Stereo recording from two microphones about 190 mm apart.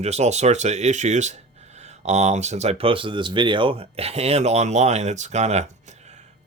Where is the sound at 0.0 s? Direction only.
35° right (ahead or behind).